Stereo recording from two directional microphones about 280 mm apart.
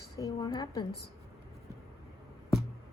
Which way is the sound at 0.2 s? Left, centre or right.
Centre.